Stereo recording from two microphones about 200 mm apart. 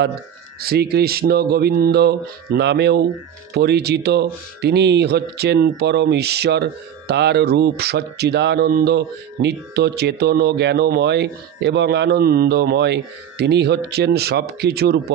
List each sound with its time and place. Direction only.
0.6 s speech: 50° right (ahead or behind)